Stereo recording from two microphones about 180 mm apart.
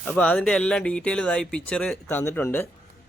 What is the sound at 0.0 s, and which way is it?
Speech, 10° left (ahead or behind).